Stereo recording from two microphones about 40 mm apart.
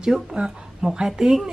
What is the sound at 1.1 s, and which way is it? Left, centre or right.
Speech, centre.